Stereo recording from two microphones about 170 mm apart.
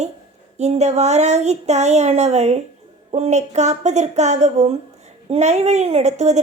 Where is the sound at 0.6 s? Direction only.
40° right (ahead or behind).